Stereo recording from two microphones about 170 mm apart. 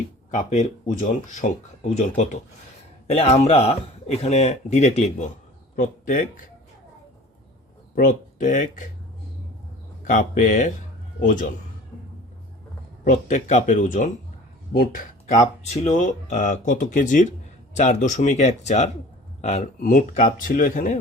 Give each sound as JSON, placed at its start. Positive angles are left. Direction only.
{"t": 0.3, "sound": "a man's voice", "side_deg": 45}
{"t": 5.7, "sound": "speech", "side_deg": 50}
{"t": 7.9, "sound": "speech", "side_deg": 50}
{"t": 10.1, "sound": "speech", "side_deg": 45}
{"t": 13.1, "sound": "speech", "side_deg": 45}